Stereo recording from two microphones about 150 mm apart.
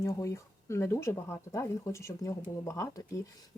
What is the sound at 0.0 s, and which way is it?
Speech, 20° left (ahead or behind).